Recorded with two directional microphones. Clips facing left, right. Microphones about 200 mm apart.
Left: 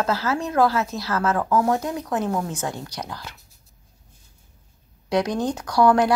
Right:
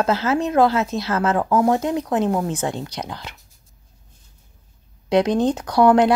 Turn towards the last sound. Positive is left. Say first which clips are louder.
# right 3 dB
turn(degrees=-20)  # may be behind; listen again after turning